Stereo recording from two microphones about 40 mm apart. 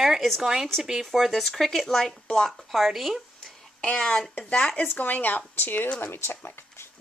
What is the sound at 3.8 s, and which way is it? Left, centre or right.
Speech, left.